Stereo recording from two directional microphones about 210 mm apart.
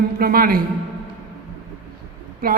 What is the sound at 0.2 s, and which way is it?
Speech, 45° right (ahead or behind).